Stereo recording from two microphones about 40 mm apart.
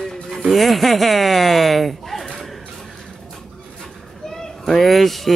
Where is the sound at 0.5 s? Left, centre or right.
Centre.